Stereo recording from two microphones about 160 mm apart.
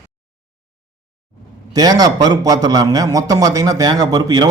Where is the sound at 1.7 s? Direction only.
25° right (ahead or behind).